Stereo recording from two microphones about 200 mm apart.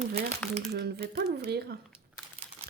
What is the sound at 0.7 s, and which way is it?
Speech, 55° right (ahead or behind).